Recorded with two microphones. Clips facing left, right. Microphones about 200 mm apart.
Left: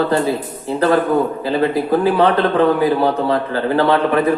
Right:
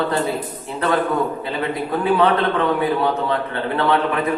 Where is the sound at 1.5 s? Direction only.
30° left (ahead or behind).